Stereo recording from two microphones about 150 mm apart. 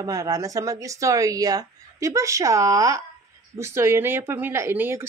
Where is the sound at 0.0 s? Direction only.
25° right (ahead or behind).